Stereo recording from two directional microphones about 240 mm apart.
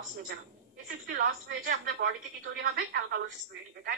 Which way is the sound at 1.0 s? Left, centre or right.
Right.